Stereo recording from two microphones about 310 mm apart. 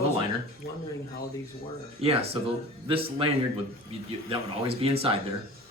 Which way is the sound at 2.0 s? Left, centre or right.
Centre.